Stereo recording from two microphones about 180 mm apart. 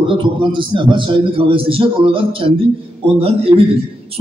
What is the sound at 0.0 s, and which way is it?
A man's voice, 30° right (ahead or behind).